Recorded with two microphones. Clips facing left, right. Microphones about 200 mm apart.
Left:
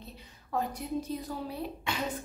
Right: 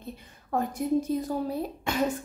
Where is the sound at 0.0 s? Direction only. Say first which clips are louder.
Right 7 dB; 50° right (ahead or behind).